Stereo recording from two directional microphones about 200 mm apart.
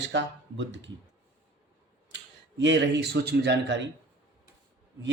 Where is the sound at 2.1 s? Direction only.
65° right (ahead or behind).